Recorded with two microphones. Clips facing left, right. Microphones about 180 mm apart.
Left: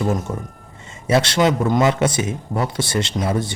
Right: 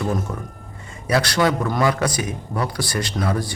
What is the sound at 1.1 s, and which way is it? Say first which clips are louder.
Speech: left 2 dB; 25° left (ahead or behind).